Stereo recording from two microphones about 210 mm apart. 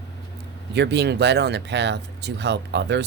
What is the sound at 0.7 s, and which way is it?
Speech, 55° right (ahead or behind).